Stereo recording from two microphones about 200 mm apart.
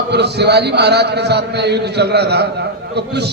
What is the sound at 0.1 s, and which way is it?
A man's voice, 55° right (ahead or behind).